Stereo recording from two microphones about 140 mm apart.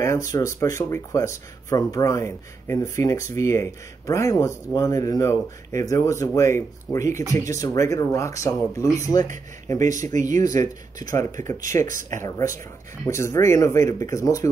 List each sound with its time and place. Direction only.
0.0 s speech: 20° left (ahead or behind)
10.4 s speech: 25° left (ahead or behind)
11.9 s speech: 70° right (ahead or behind)
12.2 s speech: 20° left (ahead or behind)